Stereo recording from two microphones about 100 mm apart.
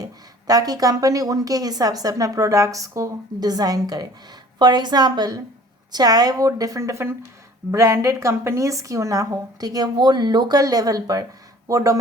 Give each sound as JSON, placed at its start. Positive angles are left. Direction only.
{"t": 0.0, "sound": "a woman's voice", "side_deg": -40}